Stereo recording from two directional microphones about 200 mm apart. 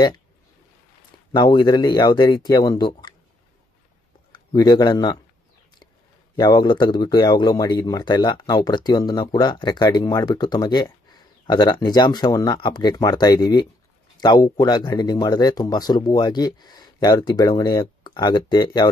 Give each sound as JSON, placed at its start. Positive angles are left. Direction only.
{"t": 1.3, "sound": "speech", "side_deg": 20}
{"t": 4.6, "sound": "speech", "side_deg": 20}
{"t": 6.3, "sound": "speech", "side_deg": 20}